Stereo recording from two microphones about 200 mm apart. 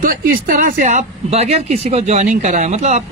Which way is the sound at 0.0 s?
45° right (ahead or behind).